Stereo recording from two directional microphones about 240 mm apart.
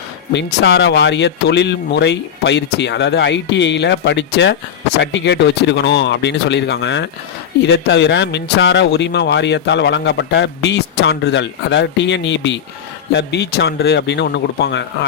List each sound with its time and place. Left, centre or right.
0.3 s speech: left